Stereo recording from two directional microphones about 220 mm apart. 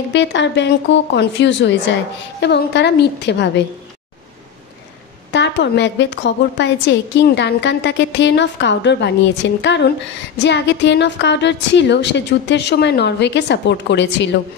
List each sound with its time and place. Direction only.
0.1 s a woman's voice: 55° left (ahead or behind)
5.3 s a woman's voice: 50° left (ahead or behind)